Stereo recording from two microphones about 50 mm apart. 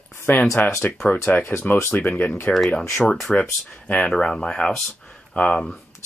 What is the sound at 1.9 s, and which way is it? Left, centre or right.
Speech, left.